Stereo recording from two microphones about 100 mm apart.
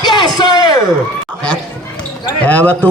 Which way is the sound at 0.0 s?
45° left (ahead or behind).